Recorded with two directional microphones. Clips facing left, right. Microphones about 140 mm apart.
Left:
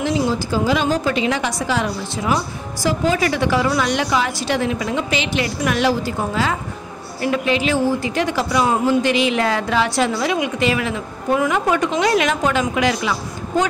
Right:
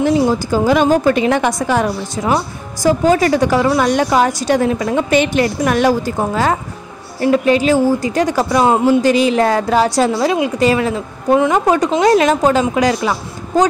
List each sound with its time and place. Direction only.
0.0 s a woman's voice: 50° right (ahead or behind)